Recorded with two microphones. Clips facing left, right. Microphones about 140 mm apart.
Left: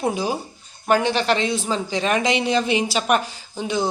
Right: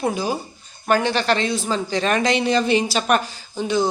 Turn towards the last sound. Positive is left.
turn(degrees=25)  # may be behind; listen again after turning